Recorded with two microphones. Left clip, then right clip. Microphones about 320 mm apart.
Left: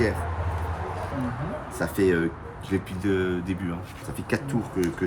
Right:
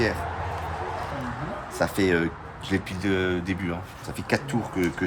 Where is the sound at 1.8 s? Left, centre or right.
Right.